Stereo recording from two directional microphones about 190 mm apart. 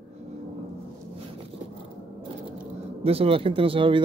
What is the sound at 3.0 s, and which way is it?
Speech, 30° right (ahead or behind).